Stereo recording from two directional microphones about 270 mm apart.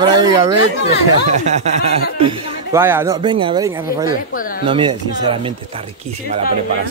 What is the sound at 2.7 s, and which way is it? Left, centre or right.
Speech, centre.